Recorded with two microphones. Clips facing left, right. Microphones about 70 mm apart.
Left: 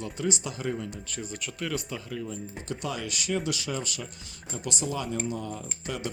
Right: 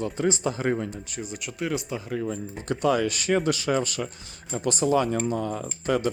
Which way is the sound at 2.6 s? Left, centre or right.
Right.